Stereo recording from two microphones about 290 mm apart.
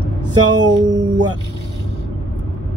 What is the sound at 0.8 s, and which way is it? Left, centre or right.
Speech, centre.